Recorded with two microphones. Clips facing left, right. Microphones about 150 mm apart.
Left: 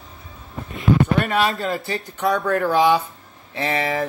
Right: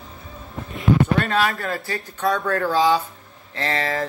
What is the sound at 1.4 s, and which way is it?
Speech, 20° left (ahead or behind).